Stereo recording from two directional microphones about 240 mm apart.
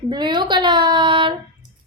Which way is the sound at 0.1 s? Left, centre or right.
Centre.